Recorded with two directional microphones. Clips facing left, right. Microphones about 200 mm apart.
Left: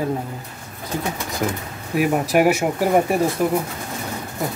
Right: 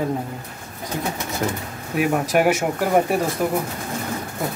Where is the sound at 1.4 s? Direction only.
5° left (ahead or behind).